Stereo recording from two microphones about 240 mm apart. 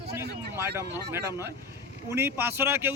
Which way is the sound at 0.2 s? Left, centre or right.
Centre.